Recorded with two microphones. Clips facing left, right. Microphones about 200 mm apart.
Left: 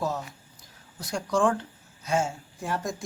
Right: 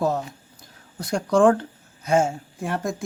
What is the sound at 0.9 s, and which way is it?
Speech, 55° right (ahead or behind).